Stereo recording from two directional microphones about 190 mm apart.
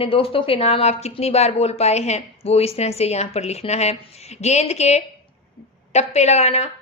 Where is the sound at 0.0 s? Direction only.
30° left (ahead or behind).